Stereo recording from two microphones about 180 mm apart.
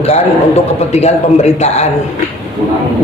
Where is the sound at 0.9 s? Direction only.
35° left (ahead or behind).